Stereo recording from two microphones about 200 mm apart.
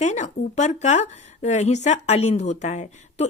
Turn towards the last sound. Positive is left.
turn(degrees=35)  # may be behind; listen again after turning